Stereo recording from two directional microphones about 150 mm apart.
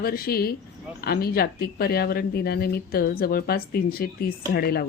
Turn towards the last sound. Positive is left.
turn(degrees=90)